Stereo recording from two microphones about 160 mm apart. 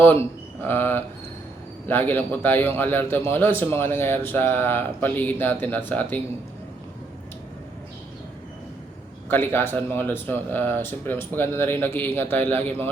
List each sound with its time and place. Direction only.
0.0 s a man's voice: 15° left (ahead or behind)
9.3 s a man's voice: 15° left (ahead or behind)